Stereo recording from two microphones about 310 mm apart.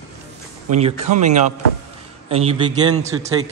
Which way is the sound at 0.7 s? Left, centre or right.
Right.